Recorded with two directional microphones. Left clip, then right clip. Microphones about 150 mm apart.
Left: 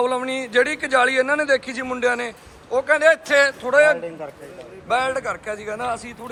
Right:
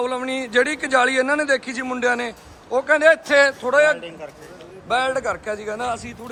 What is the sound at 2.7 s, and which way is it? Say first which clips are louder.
Speech: right 1 dB; 35° right (ahead or behind).